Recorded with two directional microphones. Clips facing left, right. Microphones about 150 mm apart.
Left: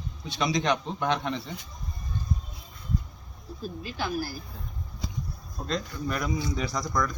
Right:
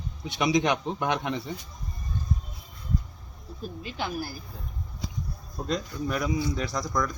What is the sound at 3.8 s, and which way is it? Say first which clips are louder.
Speech: even; 20° right (ahead or behind).